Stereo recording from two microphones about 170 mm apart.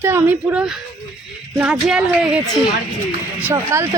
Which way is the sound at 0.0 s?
10° right (ahead or behind).